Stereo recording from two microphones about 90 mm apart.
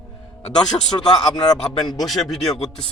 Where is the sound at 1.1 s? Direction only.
50° left (ahead or behind).